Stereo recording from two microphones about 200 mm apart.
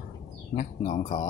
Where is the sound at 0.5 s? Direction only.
35° left (ahead or behind).